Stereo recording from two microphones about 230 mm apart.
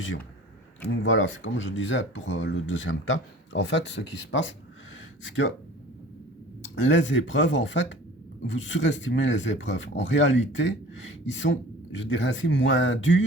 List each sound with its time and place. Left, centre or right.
0.9 s speech: left
6.8 s speech: left